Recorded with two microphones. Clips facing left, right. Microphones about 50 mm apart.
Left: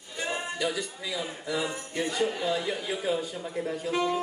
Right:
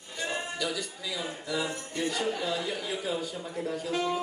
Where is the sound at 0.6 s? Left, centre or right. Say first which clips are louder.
Left 3 dB; left.